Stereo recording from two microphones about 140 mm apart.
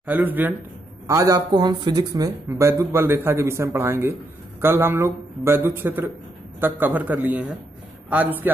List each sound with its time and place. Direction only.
0.0 s a man's voice: 10° right (ahead or behind)
1.0 s a man's voice: 25° right (ahead or behind)